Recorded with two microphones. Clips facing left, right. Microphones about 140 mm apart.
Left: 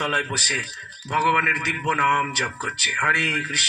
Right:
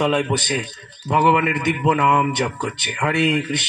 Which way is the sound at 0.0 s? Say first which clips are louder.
Right 8 dB; 25° right (ahead or behind).